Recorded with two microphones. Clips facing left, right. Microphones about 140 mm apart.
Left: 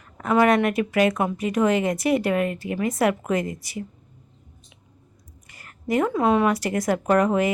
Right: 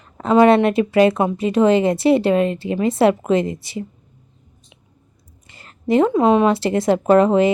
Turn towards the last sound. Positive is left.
turn(degrees=-25)  # may be behind; listen again after turning